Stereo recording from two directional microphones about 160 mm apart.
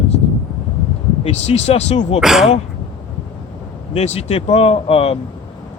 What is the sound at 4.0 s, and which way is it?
Speech, 40° left (ahead or behind).